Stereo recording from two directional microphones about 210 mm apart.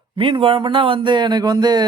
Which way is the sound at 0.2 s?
25° right (ahead or behind).